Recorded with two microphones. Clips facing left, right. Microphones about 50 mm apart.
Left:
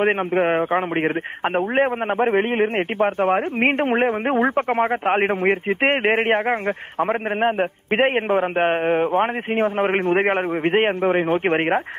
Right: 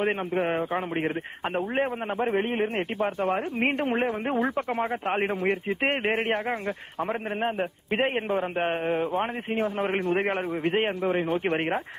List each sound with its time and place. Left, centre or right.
0.0 s a man's voice: left